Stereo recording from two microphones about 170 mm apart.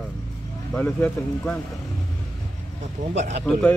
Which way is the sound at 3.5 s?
5° left (ahead or behind).